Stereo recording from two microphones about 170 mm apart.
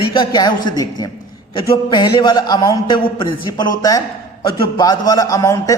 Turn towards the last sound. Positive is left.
turn(degrees=20)  # may be behind; listen again after turning